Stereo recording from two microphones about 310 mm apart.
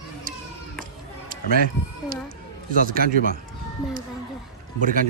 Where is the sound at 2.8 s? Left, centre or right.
Right.